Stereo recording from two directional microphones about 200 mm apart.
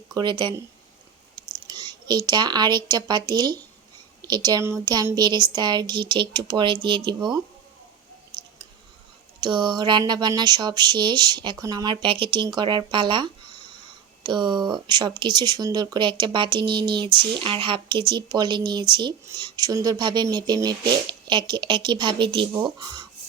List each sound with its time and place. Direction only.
0.1 s speech: 20° right (ahead or behind)
1.6 s speech: 20° right (ahead or behind)
9.4 s speech: 20° right (ahead or behind)